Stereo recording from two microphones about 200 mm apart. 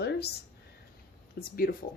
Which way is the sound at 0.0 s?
55° left (ahead or behind).